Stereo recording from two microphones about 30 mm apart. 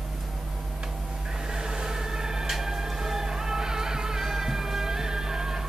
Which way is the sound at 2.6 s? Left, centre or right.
Centre.